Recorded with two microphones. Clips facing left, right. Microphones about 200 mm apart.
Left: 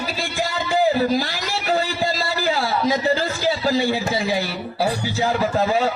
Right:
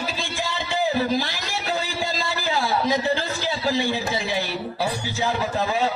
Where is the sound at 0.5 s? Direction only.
40° left (ahead or behind).